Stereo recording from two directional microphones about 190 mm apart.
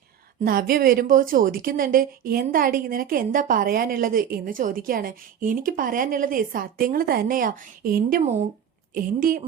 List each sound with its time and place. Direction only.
0.4 s speech: 50° right (ahead or behind)